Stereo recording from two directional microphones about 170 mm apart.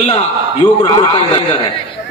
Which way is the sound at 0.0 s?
35° left (ahead or behind).